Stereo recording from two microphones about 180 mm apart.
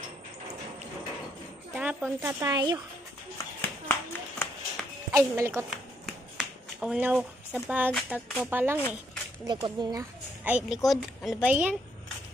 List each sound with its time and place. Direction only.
1.8 s speech: 10° right (ahead or behind)
3.9 s clapping: 10° left (ahead or behind)
5.1 s speech: 15° right (ahead or behind)
6.0 s a sound: 5° right (ahead or behind)
8.1 s speech: 10° right (ahead or behind)
9.5 s speech: 20° right (ahead or behind)
10.4 s speech: 5° right (ahead or behind)